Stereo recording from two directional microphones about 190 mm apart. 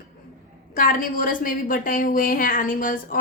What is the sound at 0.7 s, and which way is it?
Speech, 45° left (ahead or behind).